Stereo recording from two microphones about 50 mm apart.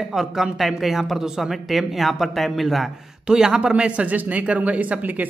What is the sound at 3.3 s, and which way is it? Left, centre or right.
Speech, centre.